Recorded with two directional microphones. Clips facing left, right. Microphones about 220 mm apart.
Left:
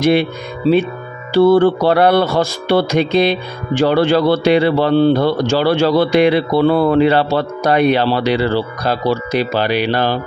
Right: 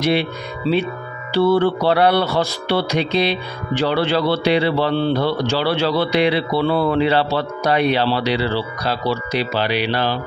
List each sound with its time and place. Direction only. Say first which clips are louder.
0.0 s music: left 5 dB; 50° left (ahead or behind)